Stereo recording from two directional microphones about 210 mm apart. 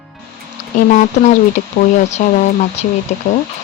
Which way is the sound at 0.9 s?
40° left (ahead or behind).